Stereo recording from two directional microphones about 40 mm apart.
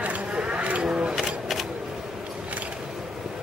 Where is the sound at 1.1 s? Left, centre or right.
Centre.